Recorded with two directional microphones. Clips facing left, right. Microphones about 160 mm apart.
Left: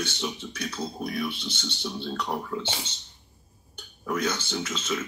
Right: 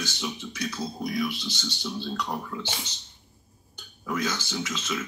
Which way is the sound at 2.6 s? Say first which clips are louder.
Left 2 dB; 25° left (ahead or behind).